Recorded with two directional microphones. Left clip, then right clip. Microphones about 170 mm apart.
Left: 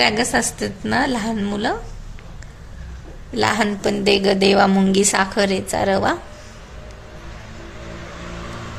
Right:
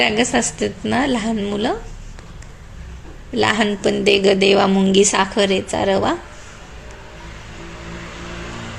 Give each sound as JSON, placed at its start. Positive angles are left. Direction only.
{"t": 0.0, "sound": "a woman's voice", "side_deg": -15}
{"t": 3.3, "sound": "a woman's voice", "side_deg": -15}